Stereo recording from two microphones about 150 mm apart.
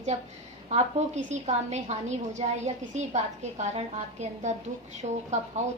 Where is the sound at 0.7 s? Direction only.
50° right (ahead or behind).